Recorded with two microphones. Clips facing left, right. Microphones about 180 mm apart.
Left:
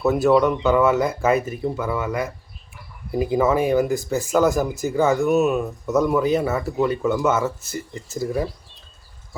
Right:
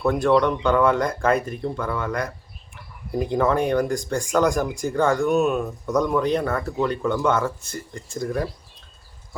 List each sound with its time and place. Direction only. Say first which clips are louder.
0.0 s speech: left 2 dB; 5° left (ahead or behind)